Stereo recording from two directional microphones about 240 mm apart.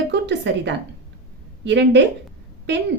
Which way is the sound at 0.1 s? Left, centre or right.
Right.